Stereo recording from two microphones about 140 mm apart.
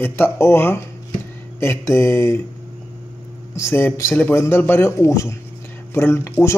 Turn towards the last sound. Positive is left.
turn(degrees=20)  # may be behind; listen again after turning